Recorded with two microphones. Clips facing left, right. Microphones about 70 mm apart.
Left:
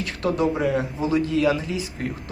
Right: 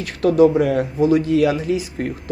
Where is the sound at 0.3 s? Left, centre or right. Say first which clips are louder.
Right 8 dB; right.